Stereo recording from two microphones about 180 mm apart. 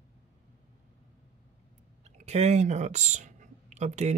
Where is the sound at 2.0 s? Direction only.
40° right (ahead or behind).